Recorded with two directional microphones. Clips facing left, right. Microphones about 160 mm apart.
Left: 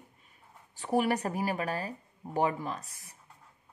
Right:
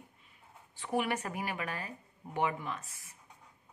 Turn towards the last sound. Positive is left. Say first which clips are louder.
# left 3 dB
turn(degrees=35)  # may be behind; listen again after turning